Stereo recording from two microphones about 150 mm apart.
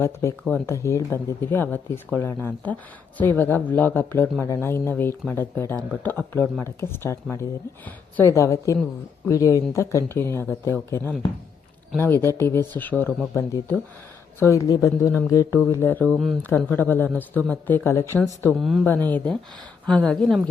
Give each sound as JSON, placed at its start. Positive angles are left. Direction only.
{"t": 0.0, "sound": "speech", "side_deg": 20}
{"t": 16.1, "sound": "speech", "side_deg": 0}
{"t": 16.4, "sound": "speech", "side_deg": 15}
{"t": 18.5, "sound": "speech", "side_deg": 0}
{"t": 18.9, "sound": "speech", "side_deg": 15}